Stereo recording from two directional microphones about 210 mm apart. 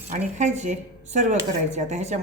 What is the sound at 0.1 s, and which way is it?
Speech, 35° right (ahead or behind).